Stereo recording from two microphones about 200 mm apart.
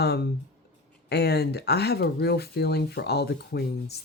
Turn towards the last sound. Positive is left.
turn(degrees=55)  # may be behind; listen again after turning